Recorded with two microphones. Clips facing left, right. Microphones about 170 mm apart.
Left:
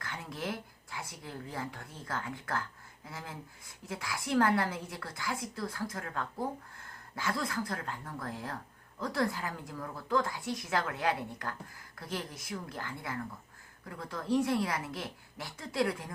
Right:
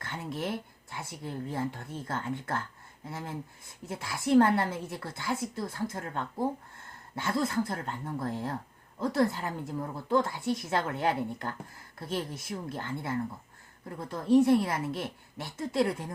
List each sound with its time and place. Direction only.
0.0 s a woman's voice: 25° right (ahead or behind)